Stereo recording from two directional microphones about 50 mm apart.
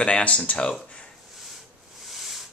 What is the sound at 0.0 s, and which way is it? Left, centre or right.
Speech, left.